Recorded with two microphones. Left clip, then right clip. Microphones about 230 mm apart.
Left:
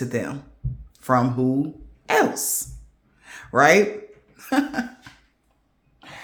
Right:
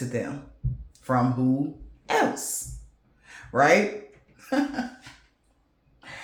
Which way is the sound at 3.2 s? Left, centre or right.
Left.